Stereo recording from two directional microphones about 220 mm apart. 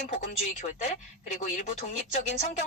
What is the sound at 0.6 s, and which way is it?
Speech, 35° left (ahead or behind).